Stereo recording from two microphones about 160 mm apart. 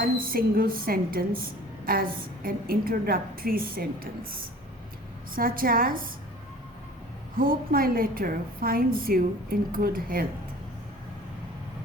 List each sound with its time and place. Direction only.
0.0 s a woman's voice: 65° right (ahead or behind)
5.3 s a woman's voice: 65° right (ahead or behind)
7.3 s a woman's voice: 65° right (ahead or behind)